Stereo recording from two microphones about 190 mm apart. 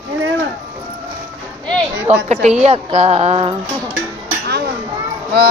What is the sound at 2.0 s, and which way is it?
A woman's voice, 35° right (ahead or behind).